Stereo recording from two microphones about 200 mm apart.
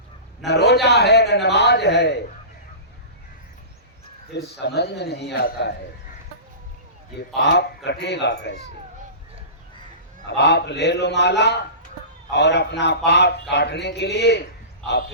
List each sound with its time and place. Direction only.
0.4 s a man's voice: 55° left (ahead or behind)
4.6 s a man's voice: 55° left (ahead or behind)
7.3 s a man's voice: 60° left (ahead or behind)
10.2 s a man's voice: 60° left (ahead or behind)